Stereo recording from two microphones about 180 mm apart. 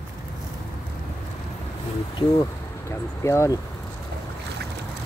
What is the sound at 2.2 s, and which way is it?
Speech, 30° left (ahead or behind).